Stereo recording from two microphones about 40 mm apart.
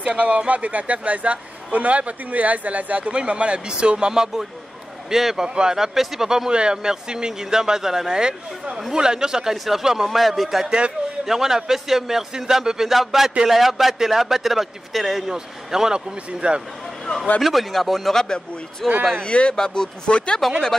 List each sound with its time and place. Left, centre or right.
0.2 s a man's voice: right; by 10.6 s centre
11.2 s a man's voice: centre
15.2 s speech: centre
16.3 s speech: right
17.4 s a man's voice: centre
18.1 s a man's voice: centre
19.2 s speech: left
19.5 s a man's voice: centre
20.4 s a man's voice: centre